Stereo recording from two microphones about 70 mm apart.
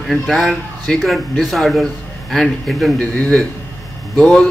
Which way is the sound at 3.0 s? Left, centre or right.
Centre.